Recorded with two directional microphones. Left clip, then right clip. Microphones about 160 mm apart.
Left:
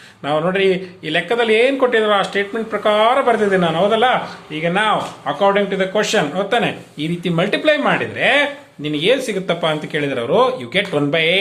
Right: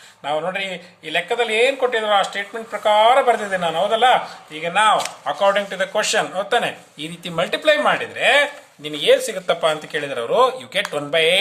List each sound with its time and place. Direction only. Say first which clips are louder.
0.3 s speech: left 6 dB; 20° right (ahead or behind)